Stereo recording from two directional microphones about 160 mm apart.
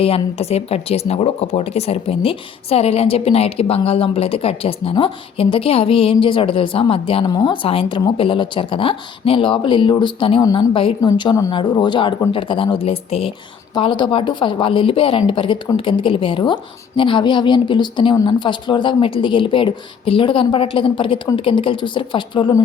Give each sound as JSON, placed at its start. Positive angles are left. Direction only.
{"t": 0.0, "sound": "speech", "side_deg": 35}